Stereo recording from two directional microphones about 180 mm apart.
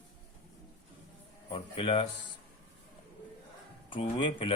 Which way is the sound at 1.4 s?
30° left (ahead or behind).